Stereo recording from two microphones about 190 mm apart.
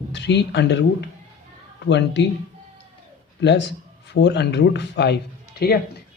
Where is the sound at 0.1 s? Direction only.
65° left (ahead or behind).